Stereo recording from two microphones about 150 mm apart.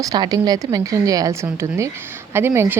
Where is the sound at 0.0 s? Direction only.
25° right (ahead or behind).